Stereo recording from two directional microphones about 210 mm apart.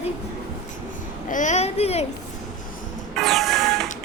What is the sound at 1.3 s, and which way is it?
Speech, 35° left (ahead or behind).